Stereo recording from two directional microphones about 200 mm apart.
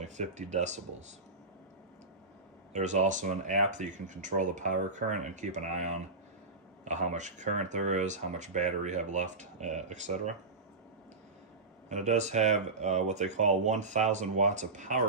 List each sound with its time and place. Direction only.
0.0 s speech: 35° right (ahead or behind)
2.7 s speech: 35° right (ahead or behind)
11.9 s speech: 35° right (ahead or behind)